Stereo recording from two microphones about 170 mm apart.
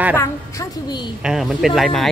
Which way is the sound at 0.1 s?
20° left (ahead or behind).